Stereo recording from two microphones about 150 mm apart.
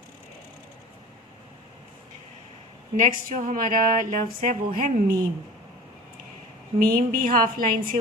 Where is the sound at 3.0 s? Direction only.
60° right (ahead or behind).